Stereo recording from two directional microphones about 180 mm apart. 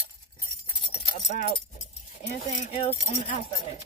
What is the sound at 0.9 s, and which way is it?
Keys jangling, 35° left (ahead or behind).